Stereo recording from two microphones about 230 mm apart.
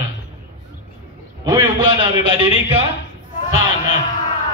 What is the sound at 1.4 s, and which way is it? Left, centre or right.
A man's voice, centre.